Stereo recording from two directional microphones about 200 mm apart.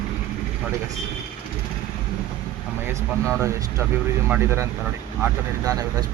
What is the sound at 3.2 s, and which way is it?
Speech, 15° right (ahead or behind).